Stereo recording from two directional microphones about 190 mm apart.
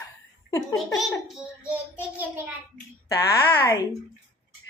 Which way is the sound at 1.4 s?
5° right (ahead or behind).